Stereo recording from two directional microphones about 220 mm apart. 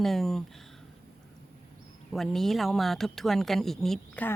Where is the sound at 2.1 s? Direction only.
Centre (ahead or behind).